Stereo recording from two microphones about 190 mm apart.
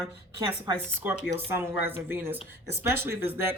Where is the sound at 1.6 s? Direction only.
10° right (ahead or behind).